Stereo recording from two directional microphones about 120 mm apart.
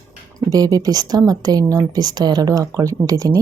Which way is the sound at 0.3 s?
30° right (ahead or behind).